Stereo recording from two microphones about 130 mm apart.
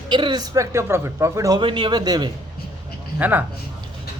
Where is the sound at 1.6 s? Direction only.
40° right (ahead or behind).